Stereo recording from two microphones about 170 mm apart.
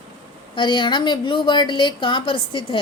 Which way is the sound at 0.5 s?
30° left (ahead or behind).